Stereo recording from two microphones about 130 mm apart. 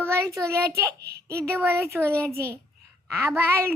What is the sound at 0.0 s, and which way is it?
A child's voice, 20° right (ahead or behind).